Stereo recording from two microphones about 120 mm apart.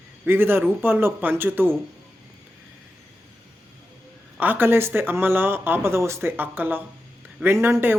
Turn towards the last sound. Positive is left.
turn(degrees=-20)  # may be behind; listen again after turning